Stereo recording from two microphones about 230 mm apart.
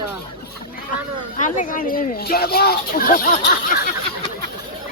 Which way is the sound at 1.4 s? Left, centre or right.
Left.